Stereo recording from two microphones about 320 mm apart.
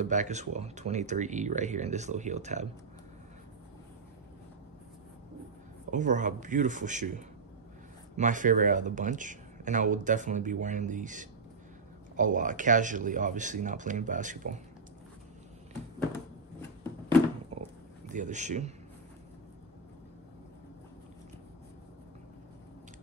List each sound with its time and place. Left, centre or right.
0.0 s speech: right
5.9 s speech: right
18.0 s a man's voice: right